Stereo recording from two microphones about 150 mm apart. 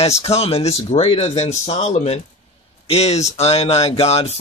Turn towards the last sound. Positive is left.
turn(degrees=45)  # may be behind; listen again after turning